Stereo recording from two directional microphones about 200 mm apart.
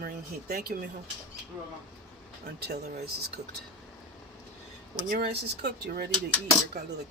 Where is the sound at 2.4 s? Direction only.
50° right (ahead or behind).